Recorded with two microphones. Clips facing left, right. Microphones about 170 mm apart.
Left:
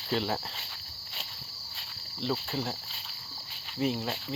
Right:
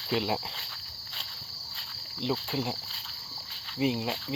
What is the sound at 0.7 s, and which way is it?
Walk, 10° left (ahead or behind).